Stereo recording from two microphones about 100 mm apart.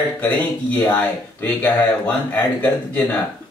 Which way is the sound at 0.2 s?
15° left (ahead or behind).